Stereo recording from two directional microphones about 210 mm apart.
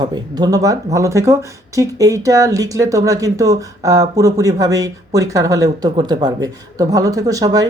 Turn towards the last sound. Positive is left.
turn(degrees=-15)  # may be behind; listen again after turning